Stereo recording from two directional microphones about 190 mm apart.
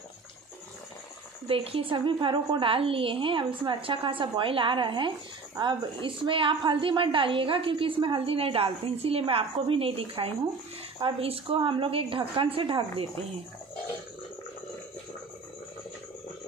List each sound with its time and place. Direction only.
1.5 s a woman's voice: 30° right (ahead or behind)